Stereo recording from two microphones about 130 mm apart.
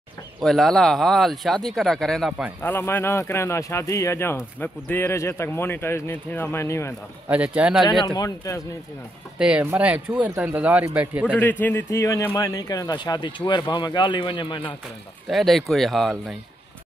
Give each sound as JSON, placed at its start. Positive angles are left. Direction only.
{"t": 0.4, "sound": "speech", "side_deg": 0}
{"t": 2.6, "sound": "speech", "side_deg": 15}
{"t": 7.2, "sound": "speech", "side_deg": -10}
{"t": 8.0, "sound": "speech", "side_deg": 30}
{"t": 9.4, "sound": "speech", "side_deg": -10}
{"t": 11.6, "sound": "speech", "side_deg": 20}
{"t": 15.2, "sound": "speech", "side_deg": 0}